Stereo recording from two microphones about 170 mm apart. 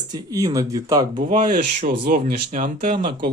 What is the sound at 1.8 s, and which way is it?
Speech, 60° right (ahead or behind).